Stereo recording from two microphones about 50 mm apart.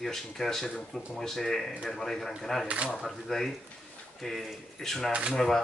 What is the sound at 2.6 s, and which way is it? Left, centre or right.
Speech, right.